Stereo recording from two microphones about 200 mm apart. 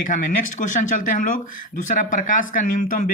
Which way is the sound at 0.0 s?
40° left (ahead or behind).